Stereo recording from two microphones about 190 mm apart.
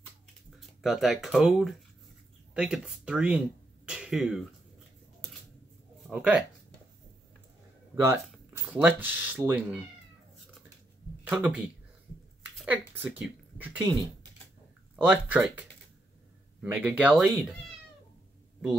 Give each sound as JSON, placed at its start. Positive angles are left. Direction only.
{"t": 0.6, "sound": "speech", "side_deg": 0}
{"t": 6.0, "sound": "speech", "side_deg": 0}
{"t": 7.9, "sound": "speech", "side_deg": -15}
{"t": 11.2, "sound": "speech", "side_deg": -5}
{"t": 15.0, "sound": "speech", "side_deg": -5}
{"t": 16.6, "sound": "speech", "side_deg": -10}